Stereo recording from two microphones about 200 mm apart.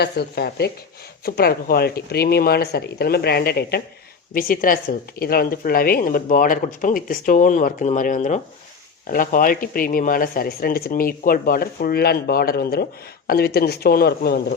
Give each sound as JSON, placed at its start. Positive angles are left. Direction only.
{"t": 0.0, "sound": "speech", "side_deg": 55}